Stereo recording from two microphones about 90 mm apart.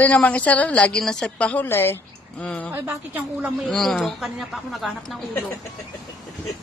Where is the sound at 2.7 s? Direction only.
20° right (ahead or behind).